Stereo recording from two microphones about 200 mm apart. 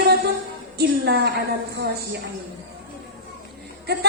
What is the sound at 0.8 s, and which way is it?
A woman's voice, 55° right (ahead or behind).